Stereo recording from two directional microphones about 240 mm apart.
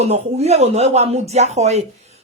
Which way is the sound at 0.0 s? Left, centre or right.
Right.